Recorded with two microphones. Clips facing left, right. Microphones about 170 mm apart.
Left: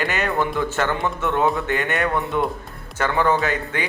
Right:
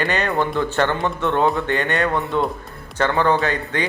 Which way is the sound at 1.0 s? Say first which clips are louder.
Right 2 dB; 20° right (ahead or behind).